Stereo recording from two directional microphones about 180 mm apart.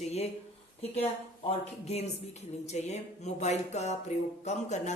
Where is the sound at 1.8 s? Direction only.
35° left (ahead or behind).